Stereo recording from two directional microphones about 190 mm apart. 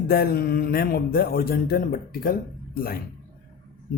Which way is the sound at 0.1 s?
50° left (ahead or behind).